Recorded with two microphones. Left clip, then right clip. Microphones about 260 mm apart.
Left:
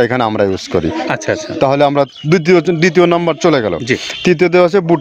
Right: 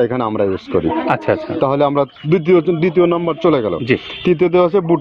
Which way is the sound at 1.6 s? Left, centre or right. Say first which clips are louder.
Left 5 dB; left.